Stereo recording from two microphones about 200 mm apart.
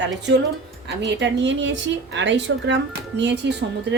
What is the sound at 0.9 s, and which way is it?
A woman's voice, 60° right (ahead or behind).